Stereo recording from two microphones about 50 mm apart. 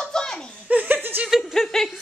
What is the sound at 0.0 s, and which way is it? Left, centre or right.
Chuckle, centre.